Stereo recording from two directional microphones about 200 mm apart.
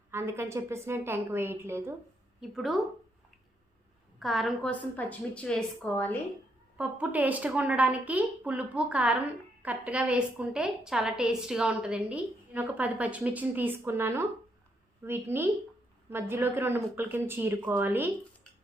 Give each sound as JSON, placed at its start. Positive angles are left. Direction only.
{"t": 0.1, "sound": "a woman's voice", "side_deg": -10}
{"t": 2.4, "sound": "a woman's voice", "side_deg": 0}
{"t": 4.2, "sound": "a woman's voice", "side_deg": 0}
{"t": 6.7, "sound": "a woman's voice", "side_deg": -5}